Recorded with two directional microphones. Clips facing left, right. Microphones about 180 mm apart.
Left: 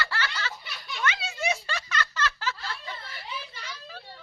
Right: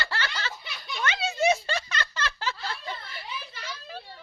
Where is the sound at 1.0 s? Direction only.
25° right (ahead or behind).